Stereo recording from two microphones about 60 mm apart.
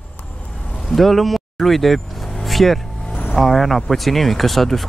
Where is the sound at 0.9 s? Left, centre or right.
Centre.